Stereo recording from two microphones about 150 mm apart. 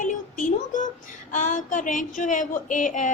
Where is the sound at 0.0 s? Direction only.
55° left (ahead or behind).